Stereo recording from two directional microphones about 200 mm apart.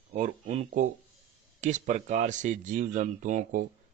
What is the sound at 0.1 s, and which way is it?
Speech, 40° right (ahead or behind).